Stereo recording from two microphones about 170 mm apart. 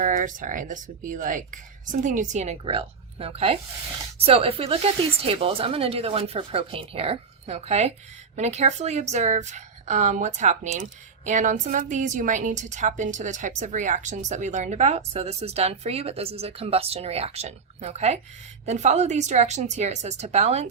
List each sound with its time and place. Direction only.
0.0 s a woman's voice: 50° right (ahead or behind)